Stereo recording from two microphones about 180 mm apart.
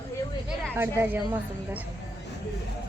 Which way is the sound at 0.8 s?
10° right (ahead or behind).